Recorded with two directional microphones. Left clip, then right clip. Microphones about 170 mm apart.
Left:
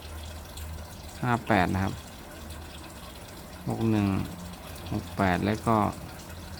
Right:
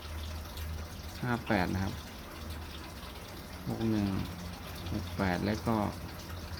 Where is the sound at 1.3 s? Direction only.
35° left (ahead or behind).